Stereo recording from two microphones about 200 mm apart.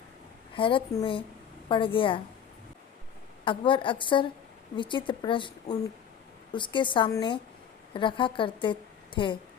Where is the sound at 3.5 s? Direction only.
25° left (ahead or behind).